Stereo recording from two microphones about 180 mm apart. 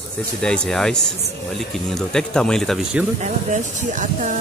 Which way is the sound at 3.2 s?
40° right (ahead or behind).